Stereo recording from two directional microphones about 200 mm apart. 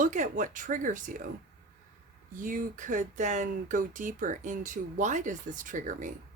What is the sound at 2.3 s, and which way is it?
Speech, 40° right (ahead or behind).